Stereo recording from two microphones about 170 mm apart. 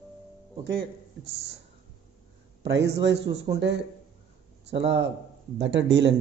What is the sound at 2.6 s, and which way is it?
Speech, 85° right.